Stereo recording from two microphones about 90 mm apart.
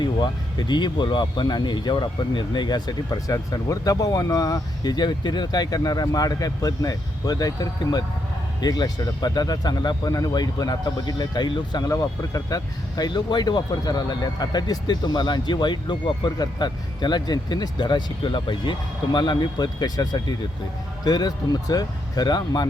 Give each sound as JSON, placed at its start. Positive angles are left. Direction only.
{"t": 0.7, "sound": "speech", "side_deg": 55}
{"t": 11.9, "sound": "speech", "side_deg": 35}